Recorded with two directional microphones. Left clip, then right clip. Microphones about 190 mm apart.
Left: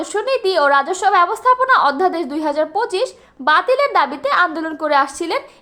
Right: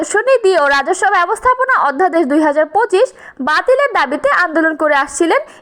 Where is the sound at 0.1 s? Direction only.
35° right (ahead or behind).